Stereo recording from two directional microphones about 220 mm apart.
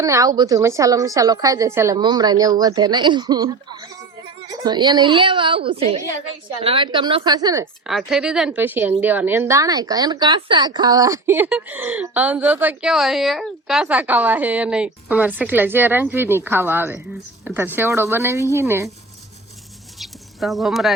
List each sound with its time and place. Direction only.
0.0 s speech: 15° right (ahead or behind)
7.9 s speech: centre (ahead or behind)
20.0 s a sound: centre (ahead or behind)